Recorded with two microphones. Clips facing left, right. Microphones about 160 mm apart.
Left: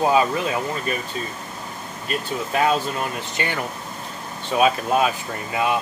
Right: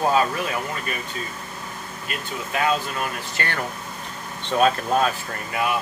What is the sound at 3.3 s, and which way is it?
Speech, 15° left (ahead or behind).